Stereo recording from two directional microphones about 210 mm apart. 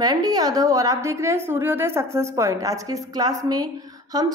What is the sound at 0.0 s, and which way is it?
A woman's voice, 15° right (ahead or behind).